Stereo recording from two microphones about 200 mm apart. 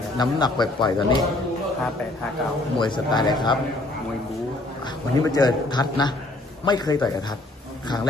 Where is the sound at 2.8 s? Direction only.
20° left (ahead or behind).